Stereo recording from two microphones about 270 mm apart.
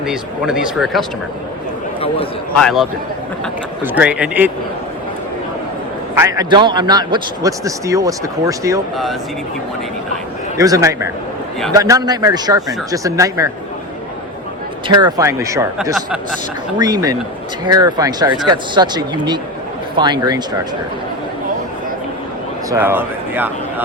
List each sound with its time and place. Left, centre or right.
0.0 s speech: centre
2.6 s speech: centre
3.9 s speech: centre
6.2 s a man's voice: centre
10.6 s a man's voice: centre
14.8 s a man's voice: centre
16.7 s a man's voice: centre
22.7 s speech: centre